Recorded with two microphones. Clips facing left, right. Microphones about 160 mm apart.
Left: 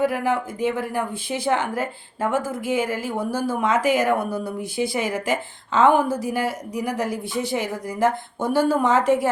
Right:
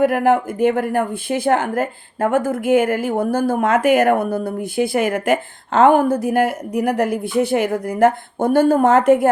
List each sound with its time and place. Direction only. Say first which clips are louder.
0.0 s speech: right 7 dB; 55° right (ahead or behind)